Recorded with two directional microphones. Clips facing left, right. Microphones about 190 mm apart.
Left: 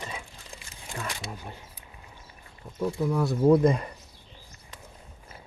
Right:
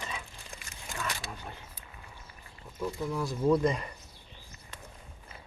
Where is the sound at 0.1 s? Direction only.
30° left (ahead or behind).